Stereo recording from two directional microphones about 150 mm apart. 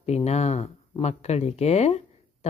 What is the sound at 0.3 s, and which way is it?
Speech, 45° left (ahead or behind).